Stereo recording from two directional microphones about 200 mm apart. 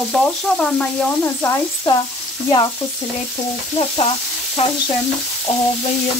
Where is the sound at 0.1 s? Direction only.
5° left (ahead or behind).